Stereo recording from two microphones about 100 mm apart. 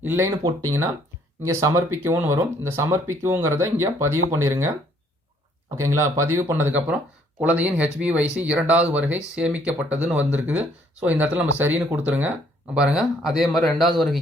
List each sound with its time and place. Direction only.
0.0 s speech: 20° right (ahead or behind)
5.7 s speech: 30° right (ahead or behind); by 14.2 s centre (ahead or behind)